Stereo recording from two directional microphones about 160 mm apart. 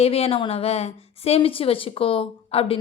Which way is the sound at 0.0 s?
40° left (ahead or behind).